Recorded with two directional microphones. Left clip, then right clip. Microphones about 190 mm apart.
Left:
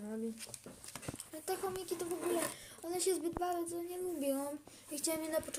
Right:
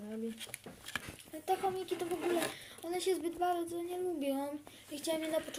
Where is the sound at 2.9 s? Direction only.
20° left (ahead or behind).